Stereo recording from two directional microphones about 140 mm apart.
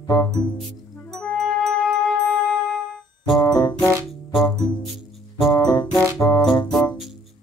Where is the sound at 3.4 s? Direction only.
25° left (ahead or behind).